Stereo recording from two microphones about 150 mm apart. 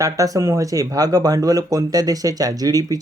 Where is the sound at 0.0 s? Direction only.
20° right (ahead or behind).